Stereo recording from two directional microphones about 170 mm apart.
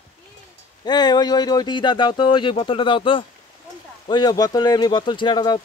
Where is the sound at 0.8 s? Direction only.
25° left (ahead or behind).